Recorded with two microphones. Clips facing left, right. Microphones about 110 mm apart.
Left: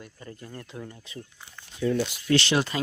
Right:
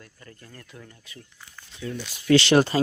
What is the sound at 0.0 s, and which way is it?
Speech, 20° left (ahead or behind).